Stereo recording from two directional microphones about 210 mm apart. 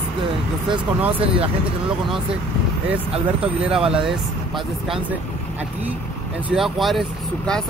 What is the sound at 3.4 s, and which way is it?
Speech, 5° right (ahead or behind).